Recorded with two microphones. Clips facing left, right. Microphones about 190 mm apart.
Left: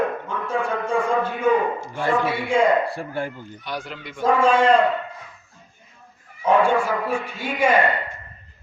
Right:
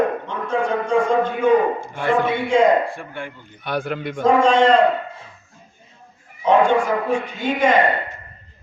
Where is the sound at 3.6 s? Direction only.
55° right (ahead or behind).